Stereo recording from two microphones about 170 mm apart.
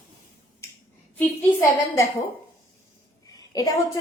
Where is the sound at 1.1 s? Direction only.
15° left (ahead or behind).